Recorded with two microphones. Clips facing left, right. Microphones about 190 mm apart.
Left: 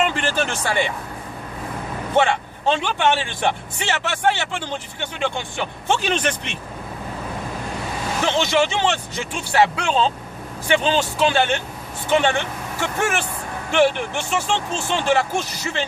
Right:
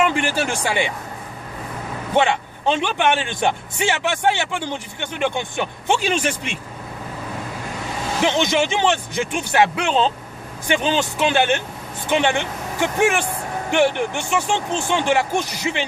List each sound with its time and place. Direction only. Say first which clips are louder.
0.2 s speech: right 1 dB; 10° right (ahead or behind)
2.1 s speech: even; 15° right (ahead or behind)
8.2 s speech: right 1 dB; 15° right (ahead or behind)